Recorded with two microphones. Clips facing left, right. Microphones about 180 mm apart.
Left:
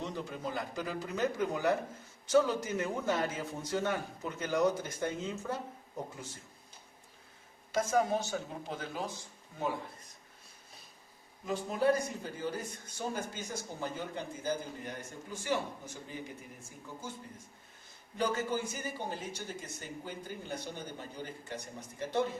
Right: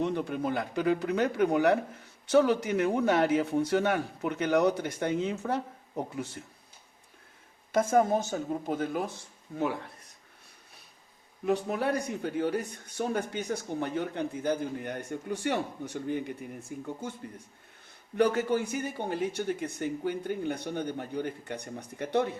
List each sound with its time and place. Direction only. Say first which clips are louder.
0.0 s a man's voice: right 9 dB; 60° right (ahead or behind)
7.7 s speech: right 5 dB; 55° right (ahead or behind)
11.4 s speech: right 2 dB; 65° right (ahead or behind)
18.2 s speech: right 7 dB; 65° right (ahead or behind)